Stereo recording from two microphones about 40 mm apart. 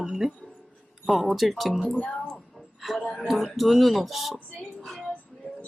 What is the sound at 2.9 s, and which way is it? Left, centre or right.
Music, centre.